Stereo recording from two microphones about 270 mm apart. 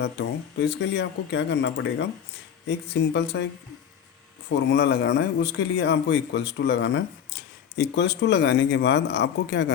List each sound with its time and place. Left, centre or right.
0.0 s speech: left